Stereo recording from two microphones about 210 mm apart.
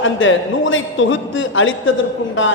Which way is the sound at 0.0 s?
65° left (ahead or behind).